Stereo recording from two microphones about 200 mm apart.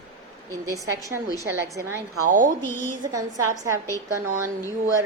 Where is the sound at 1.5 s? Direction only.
70° right (ahead or behind).